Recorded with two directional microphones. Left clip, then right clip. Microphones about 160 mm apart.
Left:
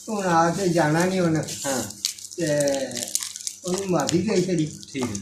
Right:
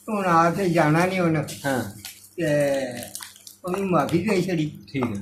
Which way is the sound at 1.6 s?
65° right (ahead or behind).